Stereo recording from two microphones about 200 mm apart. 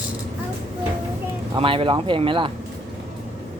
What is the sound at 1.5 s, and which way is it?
Speech, 25° right (ahead or behind).